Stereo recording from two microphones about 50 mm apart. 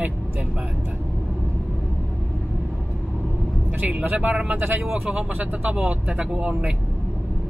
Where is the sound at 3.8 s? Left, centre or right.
Right.